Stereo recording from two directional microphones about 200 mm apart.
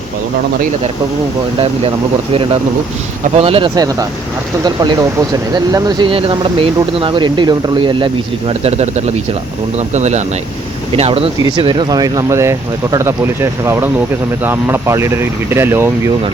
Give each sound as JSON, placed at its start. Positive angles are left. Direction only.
{"t": 2.3, "sound": "speech", "side_deg": -30}